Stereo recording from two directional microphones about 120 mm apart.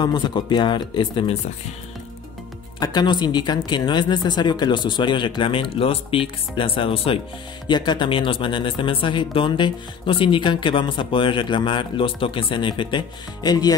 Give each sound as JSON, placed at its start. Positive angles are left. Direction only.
{"t": 0.0, "sound": "speech", "side_deg": 40}
{"t": 2.8, "sound": "speech", "side_deg": 35}
{"t": 7.6, "sound": "speech", "side_deg": 40}